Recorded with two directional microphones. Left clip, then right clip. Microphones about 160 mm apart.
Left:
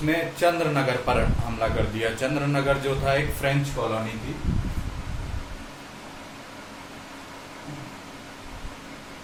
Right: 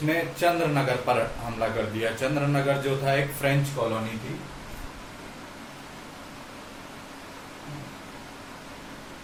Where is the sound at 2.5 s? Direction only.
10° left (ahead or behind).